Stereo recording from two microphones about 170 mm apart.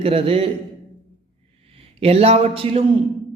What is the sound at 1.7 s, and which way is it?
A man's voice, 35° right (ahead or behind).